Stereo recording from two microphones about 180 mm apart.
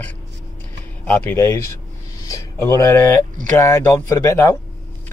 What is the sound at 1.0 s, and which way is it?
A man's voice, 10° left (ahead or behind).